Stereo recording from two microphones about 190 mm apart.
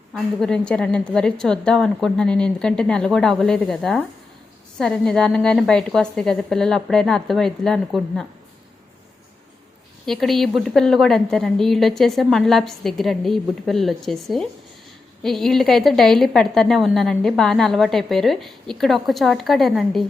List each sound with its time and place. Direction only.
0.1 s a woman's voice: centre (ahead or behind)
10.1 s a woman's voice: centre (ahead or behind)